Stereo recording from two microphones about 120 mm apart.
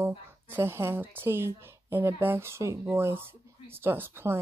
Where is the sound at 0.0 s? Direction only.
20° right (ahead or behind).